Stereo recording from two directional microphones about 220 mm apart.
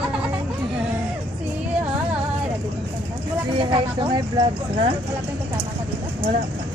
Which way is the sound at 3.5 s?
20° right (ahead or behind).